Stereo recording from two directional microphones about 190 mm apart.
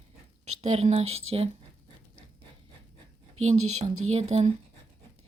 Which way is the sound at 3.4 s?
35° right (ahead or behind).